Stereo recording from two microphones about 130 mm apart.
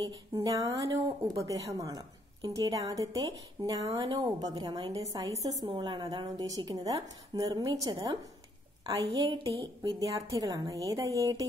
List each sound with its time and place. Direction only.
0.0 s a woman's voice: 30° right (ahead or behind)
3.9 s speech: 45° right (ahead or behind)
4.2 s a woman's voice: 30° right (ahead or behind)
5.7 s a woman's voice: 35° right (ahead or behind)